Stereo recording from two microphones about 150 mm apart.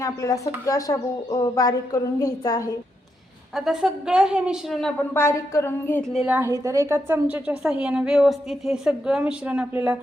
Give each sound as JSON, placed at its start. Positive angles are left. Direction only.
{"t": 0.0, "sound": "speech", "side_deg": 20}
{"t": 3.5, "sound": "a woman's voice", "side_deg": -5}
{"t": 5.1, "sound": "a woman's voice", "side_deg": 15}
{"t": 6.1, "sound": "a woman's voice", "side_deg": -10}